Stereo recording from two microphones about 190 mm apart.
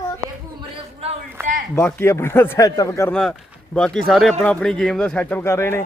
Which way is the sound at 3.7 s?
5° left (ahead or behind).